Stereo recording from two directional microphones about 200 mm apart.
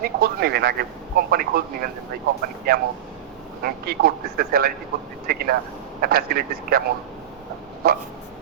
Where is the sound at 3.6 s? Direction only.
50° right (ahead or behind).